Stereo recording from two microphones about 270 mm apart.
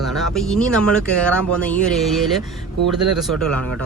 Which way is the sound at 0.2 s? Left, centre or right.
Centre.